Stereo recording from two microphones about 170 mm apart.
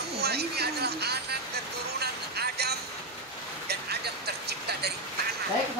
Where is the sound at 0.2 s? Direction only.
70° right (ahead or behind).